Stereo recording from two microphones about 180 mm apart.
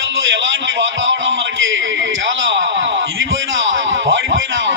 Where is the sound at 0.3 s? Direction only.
90° right.